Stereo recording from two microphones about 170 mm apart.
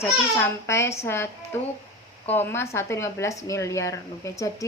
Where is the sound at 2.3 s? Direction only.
15° left (ahead or behind).